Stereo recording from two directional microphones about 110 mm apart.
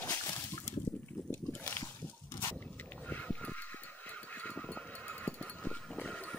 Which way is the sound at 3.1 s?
15° left (ahead or behind).